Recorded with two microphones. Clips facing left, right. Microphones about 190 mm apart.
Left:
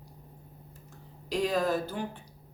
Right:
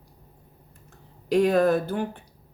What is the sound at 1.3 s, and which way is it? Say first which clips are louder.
Speech: right 8 dB; 60° right (ahead or behind).